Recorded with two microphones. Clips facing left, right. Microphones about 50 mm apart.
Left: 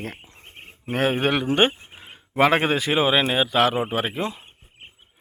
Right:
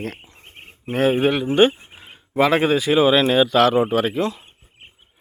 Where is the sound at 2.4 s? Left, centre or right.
Left.